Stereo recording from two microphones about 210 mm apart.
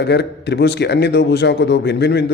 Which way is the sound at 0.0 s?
55° left (ahead or behind).